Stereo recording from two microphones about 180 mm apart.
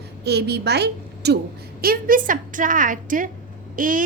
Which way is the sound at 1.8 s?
55° right (ahead or behind).